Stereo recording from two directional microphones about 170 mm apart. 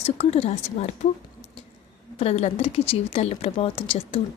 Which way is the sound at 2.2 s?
40° left (ahead or behind).